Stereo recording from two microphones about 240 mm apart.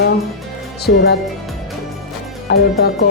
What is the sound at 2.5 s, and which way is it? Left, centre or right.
Speech, left.